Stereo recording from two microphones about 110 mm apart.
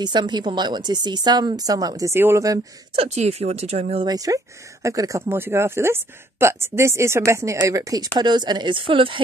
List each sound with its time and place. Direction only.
0.0 s a woman's voice: 40° right (ahead or behind)
3.0 s speech: 80° right
4.0 s a woman's voice: 35° right (ahead or behind); by 9.2 s 50° right (ahead or behind)